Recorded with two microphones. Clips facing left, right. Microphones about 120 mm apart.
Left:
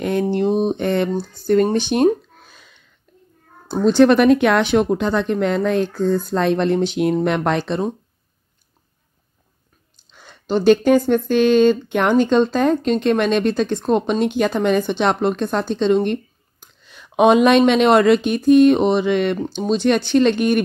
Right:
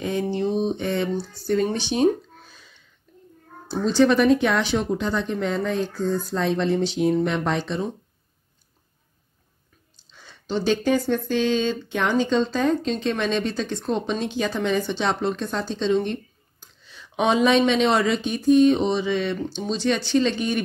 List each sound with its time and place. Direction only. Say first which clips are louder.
0.0 s speech: left 5 dB; 60° left (ahead or behind)
10.1 s speech: left 6 dB; 55° left (ahead or behind)